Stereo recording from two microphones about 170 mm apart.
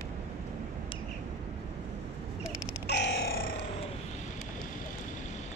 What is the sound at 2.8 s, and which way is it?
Grunt, 90° left.